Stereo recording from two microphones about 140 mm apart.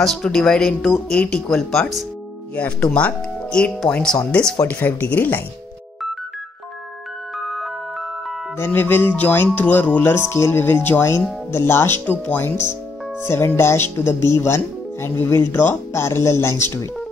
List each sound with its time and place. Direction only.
0.0 s speech: centre (ahead or behind)
8.5 s speech: 15° left (ahead or behind)